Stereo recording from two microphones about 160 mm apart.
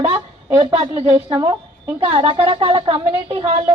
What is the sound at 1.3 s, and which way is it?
Speech, 25° right (ahead or behind).